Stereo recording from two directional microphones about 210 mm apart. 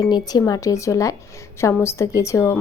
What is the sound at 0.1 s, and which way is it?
Speech, 20° left (ahead or behind).